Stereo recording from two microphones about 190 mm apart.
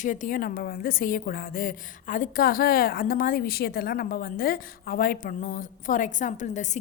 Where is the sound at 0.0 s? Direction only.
40° left (ahead or behind).